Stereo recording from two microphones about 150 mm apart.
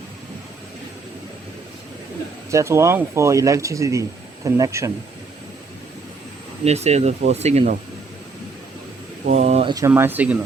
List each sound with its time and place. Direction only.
2.5 s speech: 20° right (ahead or behind)
6.7 s speech: 45° right (ahead or behind)
9.2 s speech: 50° right (ahead or behind)
9.6 s speech: 25° right (ahead or behind)
9.9 s speech: 15° right (ahead or behind)